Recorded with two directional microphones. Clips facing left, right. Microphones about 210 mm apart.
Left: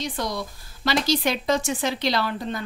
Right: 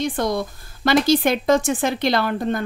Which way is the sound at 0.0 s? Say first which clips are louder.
Right 7 dB; 55° right (ahead or behind).